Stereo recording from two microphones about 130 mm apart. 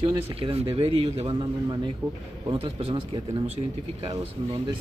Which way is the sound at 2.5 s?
45° right (ahead or behind).